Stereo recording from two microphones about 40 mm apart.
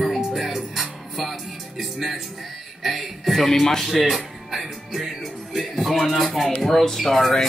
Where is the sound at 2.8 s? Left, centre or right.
Centre.